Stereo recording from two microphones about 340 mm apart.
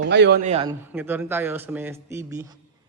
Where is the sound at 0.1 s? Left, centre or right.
Right.